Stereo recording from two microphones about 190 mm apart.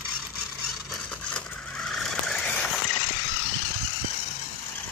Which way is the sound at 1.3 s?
Centre (ahead or behind).